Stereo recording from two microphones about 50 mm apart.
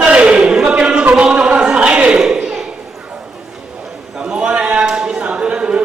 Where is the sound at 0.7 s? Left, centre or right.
Centre.